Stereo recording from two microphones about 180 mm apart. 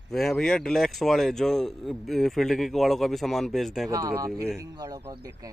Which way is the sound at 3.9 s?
20° right (ahead or behind).